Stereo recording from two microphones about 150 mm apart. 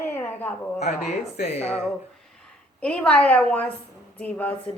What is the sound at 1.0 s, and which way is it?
Speech, 45° left (ahead or behind).